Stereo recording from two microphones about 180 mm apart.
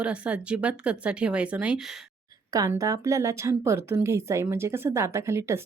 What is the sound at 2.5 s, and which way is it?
Speech, 20° right (ahead or behind).